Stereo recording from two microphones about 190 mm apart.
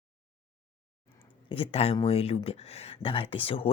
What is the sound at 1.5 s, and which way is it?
Speech, 30° left (ahead or behind).